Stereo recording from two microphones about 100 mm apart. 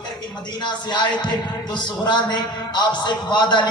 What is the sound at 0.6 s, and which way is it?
A man's voice, 50° left (ahead or behind).